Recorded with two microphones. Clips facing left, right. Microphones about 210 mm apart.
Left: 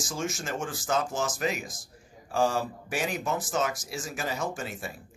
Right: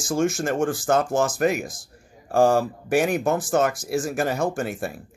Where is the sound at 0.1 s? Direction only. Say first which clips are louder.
Right 12 dB; 50° right (ahead or behind).